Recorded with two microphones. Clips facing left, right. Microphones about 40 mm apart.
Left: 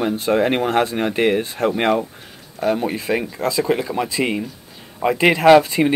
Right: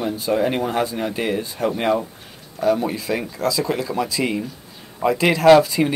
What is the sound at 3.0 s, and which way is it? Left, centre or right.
Speech, left.